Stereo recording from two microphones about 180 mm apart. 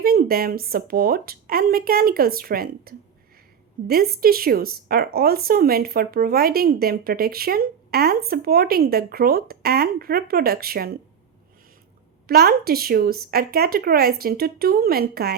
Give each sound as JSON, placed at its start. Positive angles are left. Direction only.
{"t": 0.0, "sound": "speech", "side_deg": -55}
{"t": 12.3, "sound": "speech", "side_deg": -60}